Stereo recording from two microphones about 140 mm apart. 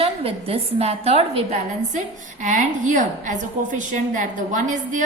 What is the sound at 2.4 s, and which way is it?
A woman's voice, 65° right (ahead or behind).